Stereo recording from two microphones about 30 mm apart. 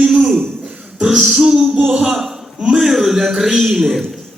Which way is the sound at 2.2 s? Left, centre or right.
Centre.